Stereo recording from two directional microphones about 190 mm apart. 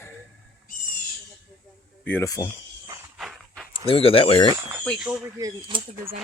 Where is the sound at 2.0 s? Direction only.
10° left (ahead or behind).